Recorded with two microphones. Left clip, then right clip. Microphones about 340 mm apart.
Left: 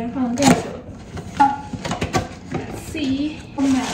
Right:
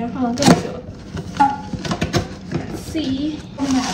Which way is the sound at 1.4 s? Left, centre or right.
Centre.